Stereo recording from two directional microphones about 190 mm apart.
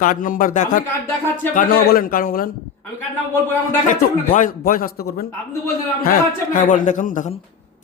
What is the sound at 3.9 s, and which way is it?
A man's voice, 45° left (ahead or behind).